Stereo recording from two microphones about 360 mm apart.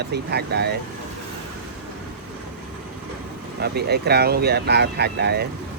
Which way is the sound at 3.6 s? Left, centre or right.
Right.